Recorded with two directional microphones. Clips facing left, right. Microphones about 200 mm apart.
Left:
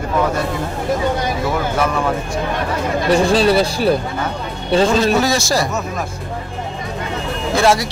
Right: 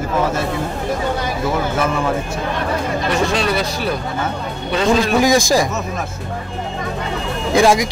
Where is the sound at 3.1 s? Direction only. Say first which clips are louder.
Left 6 dB; 30° left (ahead or behind).